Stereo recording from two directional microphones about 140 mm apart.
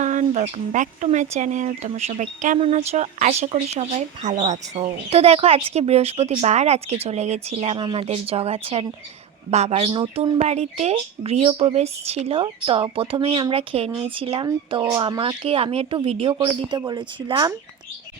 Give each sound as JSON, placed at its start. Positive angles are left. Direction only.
{"t": 0.0, "sound": "speech", "side_deg": -60}
{"t": 2.6, "sound": "speech", "side_deg": -45}
{"t": 10.3, "sound": "speech", "side_deg": -50}
{"t": 16.8, "sound": "speech", "side_deg": -30}